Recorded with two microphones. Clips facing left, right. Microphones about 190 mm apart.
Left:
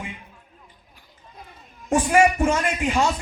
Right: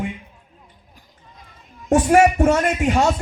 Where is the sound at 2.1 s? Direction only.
40° right (ahead or behind).